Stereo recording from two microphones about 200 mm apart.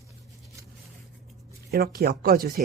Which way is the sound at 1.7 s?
50° right (ahead or behind).